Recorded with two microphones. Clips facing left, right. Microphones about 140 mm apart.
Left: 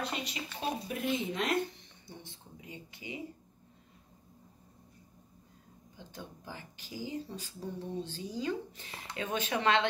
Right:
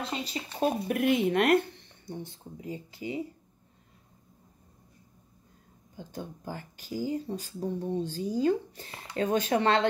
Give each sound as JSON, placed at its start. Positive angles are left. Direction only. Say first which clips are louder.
{"t": 0.0, "sound": "speech", "louder": "right 3 dB", "side_deg": -30}
{"t": 0.6, "sound": "speech", "louder": "right 9 dB", "side_deg": -55}
{"t": 2.2, "sound": "speech", "louder": "right 10 dB", "side_deg": -35}
{"t": 5.9, "sound": "speech", "louder": "right 7 dB", "side_deg": -45}